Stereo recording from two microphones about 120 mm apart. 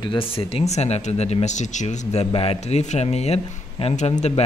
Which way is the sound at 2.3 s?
55° left (ahead or behind).